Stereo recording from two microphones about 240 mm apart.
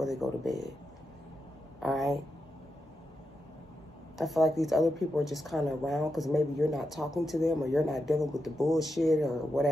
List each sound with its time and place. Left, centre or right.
0.0 s a woman's voice: centre
1.8 s a woman's voice: centre
4.2 s a woman's voice: centre